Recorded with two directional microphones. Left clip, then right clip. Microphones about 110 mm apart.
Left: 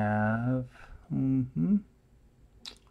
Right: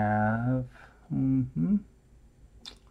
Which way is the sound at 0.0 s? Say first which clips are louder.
Right 2 dB; 30° left (ahead or behind).